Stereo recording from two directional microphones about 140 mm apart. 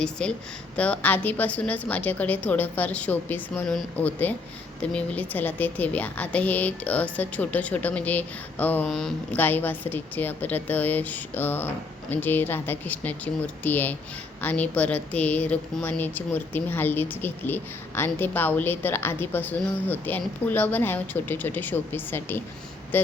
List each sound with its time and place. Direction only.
0.0 s speech: 5° left (ahead or behind)